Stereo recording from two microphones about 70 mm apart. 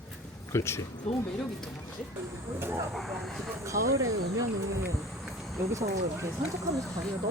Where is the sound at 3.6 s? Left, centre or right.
Right.